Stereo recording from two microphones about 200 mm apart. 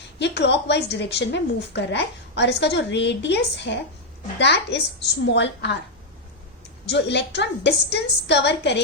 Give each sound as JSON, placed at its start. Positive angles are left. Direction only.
{"t": 0.2, "sound": "a woman's voice", "side_deg": 60}
{"t": 6.8, "sound": "a woman's voice", "side_deg": 60}